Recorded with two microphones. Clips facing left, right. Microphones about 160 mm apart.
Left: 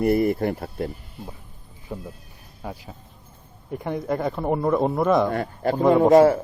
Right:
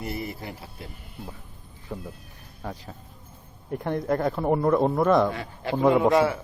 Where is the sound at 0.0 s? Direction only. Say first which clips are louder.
Left 13 dB; 55° left (ahead or behind).